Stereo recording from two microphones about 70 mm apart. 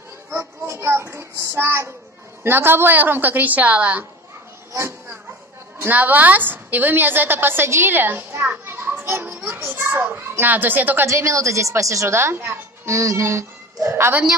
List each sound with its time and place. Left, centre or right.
0.4 s child singing: right
2.4 s a woman's voice: right
5.8 s a woman's voice: right
11.1 s a woman's voice: right